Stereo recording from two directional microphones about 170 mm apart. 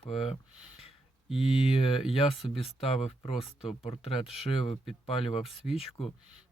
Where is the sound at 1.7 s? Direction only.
35° left (ahead or behind).